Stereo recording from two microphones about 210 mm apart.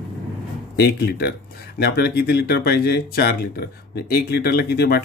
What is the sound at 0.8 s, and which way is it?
Speech, 50° left (ahead or behind).